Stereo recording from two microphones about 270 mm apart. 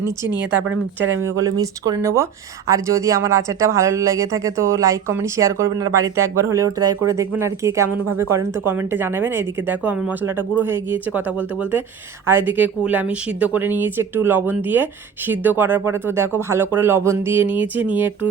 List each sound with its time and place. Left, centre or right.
0.3 s speech: centre
1.0 s speech: right
1.4 s speech: centre